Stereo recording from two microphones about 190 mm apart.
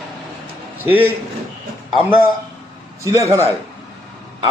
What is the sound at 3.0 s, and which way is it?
Speech, 15° right (ahead or behind).